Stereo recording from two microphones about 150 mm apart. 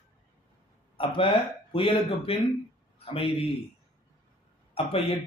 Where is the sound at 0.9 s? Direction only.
35° left (ahead or behind).